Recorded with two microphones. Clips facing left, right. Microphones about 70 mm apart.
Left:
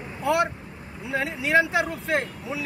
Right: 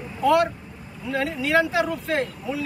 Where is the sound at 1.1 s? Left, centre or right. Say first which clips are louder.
Right 2 dB; centre.